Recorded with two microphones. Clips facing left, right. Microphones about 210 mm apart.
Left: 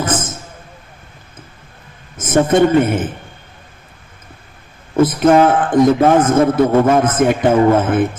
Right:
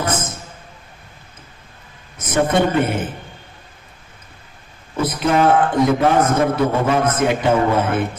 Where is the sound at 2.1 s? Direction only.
50° left (ahead or behind).